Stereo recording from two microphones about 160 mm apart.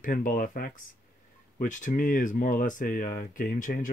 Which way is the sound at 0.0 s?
60° left (ahead or behind).